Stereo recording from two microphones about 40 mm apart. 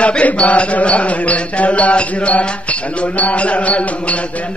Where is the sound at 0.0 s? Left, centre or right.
Left.